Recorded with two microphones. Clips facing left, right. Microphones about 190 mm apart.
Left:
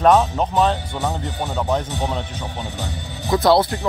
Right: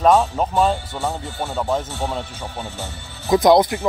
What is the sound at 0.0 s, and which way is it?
Speech, centre (ahead or behind).